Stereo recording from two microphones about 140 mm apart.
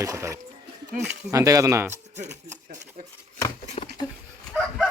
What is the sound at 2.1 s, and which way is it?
Speech, 55° right (ahead or behind).